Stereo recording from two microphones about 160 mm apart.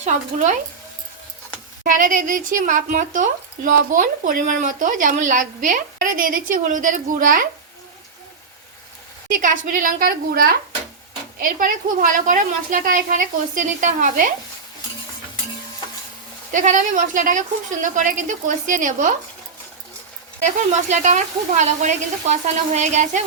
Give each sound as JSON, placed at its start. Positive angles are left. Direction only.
{"t": 0.0, "sound": "a woman's voice", "side_deg": -50}
{"t": 1.8, "sound": "speech", "side_deg": -55}
{"t": 9.3, "sound": "speech", "side_deg": -55}
{"t": 16.5, "sound": "a woman's voice", "side_deg": -50}
{"t": 20.9, "sound": "a woman's voice", "side_deg": -50}